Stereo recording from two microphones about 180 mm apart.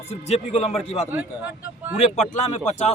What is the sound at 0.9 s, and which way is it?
Speech, 10° right (ahead or behind).